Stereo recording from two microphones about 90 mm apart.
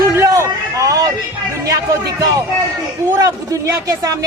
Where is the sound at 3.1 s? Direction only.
35° right (ahead or behind).